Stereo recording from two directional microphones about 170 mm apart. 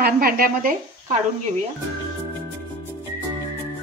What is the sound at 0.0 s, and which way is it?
Speech, 60° right (ahead or behind).